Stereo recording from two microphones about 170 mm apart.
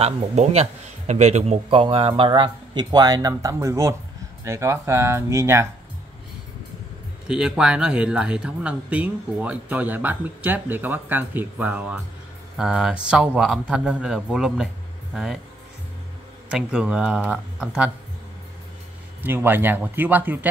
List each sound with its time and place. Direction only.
0.0 s a man's voice: 40° right (ahead or behind); by 5.7 s 15° right (ahead or behind)
7.2 s speech: 5° right (ahead or behind)
16.4 s speech: 5° right (ahead or behind)
19.2 s speech: 10° right (ahead or behind)